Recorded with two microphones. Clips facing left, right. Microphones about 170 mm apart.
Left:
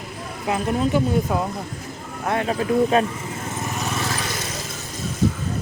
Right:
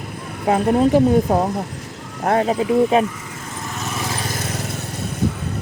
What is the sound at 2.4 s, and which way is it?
Speech, 20° right (ahead or behind).